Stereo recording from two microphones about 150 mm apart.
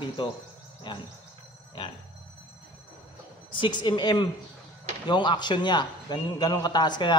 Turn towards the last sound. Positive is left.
turn(degrees=30)  # may be behind; listen again after turning